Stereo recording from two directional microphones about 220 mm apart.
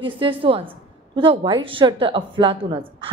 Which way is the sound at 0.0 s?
25° right (ahead or behind).